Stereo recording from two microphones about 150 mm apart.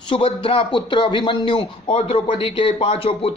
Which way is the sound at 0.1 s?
35° left (ahead or behind).